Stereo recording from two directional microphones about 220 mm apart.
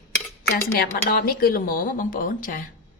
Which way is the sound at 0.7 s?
45° left (ahead or behind).